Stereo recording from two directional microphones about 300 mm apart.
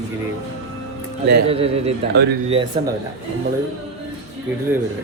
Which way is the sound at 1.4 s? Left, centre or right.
Centre.